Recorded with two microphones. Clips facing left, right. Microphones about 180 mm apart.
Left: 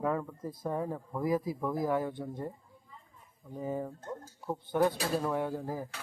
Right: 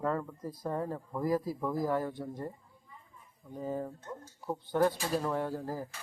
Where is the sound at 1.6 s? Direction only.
25° left (ahead or behind).